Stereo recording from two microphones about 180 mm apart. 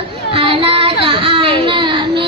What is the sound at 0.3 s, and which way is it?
Child singing, 30° right (ahead or behind).